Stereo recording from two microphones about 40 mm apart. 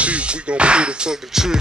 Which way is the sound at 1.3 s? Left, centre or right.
Centre.